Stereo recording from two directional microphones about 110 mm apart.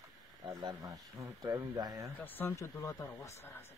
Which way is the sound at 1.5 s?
30° right (ahead or behind).